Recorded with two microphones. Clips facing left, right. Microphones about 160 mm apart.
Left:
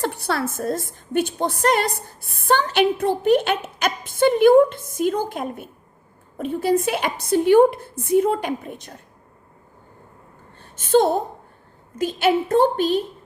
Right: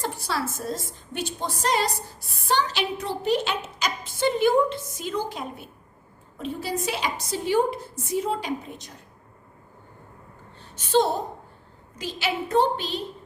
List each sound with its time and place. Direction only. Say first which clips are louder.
0.0 s a woman's voice: left 5 dB; 60° left (ahead or behind)
10.6 s a sound: left 5 dB; 50° left (ahead or behind)
11.9 s a woman's voice: left 9 dB; 50° left (ahead or behind)